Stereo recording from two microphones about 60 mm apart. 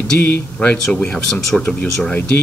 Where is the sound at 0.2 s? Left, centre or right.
Left.